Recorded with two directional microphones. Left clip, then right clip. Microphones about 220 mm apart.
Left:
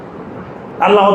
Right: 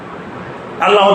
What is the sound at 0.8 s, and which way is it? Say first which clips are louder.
Speech: left 1 dB; 35° right (ahead or behind).